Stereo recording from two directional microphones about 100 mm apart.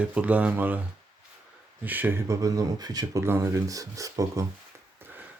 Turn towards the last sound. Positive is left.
turn(degrees=-20)  # may be behind; listen again after turning